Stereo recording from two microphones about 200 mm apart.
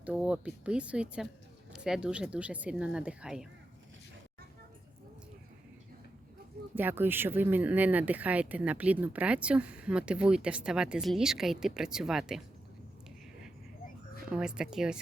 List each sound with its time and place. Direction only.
0.0 s speech: 5° right (ahead or behind)
6.7 s speech: 10° right (ahead or behind)
14.3 s speech: 5° right (ahead or behind)